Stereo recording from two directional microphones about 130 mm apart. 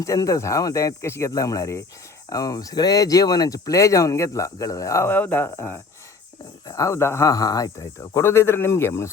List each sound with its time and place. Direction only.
0.0 s speech: 25° left (ahead or behind)